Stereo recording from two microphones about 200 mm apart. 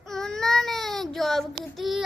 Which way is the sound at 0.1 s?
5° left (ahead or behind).